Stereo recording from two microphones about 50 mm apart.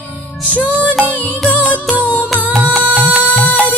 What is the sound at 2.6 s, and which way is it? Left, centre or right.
Music, right.